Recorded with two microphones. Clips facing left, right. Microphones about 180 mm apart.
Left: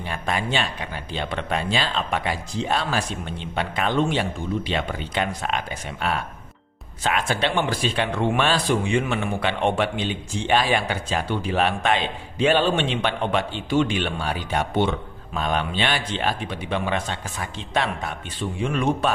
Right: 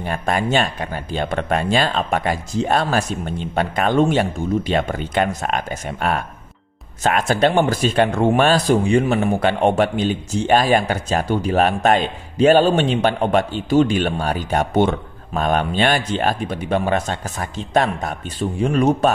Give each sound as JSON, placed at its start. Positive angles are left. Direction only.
{"t": 0.0, "sound": "speech", "side_deg": -45}